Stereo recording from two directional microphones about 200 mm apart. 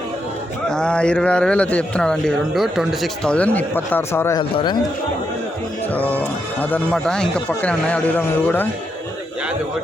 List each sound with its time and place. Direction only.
0.7 s a man's voice: 5° left (ahead or behind); by 4.8 s 20° left (ahead or behind)
5.9 s speech: 10° left (ahead or behind)